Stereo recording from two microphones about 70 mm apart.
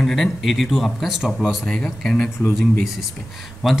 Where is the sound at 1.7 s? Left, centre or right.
Centre.